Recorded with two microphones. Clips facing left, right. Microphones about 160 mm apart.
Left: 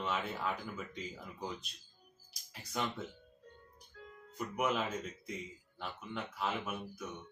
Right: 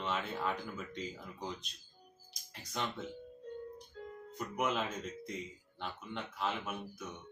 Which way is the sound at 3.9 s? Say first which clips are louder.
Right 5 dB; 25° right (ahead or behind).